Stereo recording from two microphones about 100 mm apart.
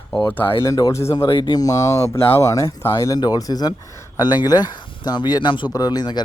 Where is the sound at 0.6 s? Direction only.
35° left (ahead or behind).